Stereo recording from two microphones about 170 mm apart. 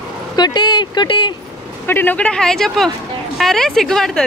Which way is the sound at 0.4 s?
25° left (ahead or behind).